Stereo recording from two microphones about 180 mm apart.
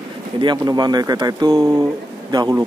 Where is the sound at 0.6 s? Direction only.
20° right (ahead or behind).